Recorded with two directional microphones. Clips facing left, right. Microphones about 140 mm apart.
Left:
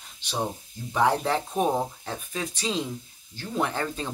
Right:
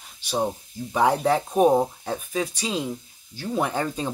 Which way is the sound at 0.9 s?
15° right (ahead or behind).